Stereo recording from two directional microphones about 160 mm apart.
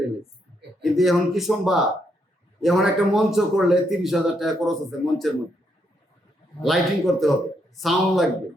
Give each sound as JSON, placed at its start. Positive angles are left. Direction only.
{"t": 0.8, "sound": "a man's voice", "side_deg": 0}
{"t": 6.6, "sound": "a man's voice", "side_deg": 0}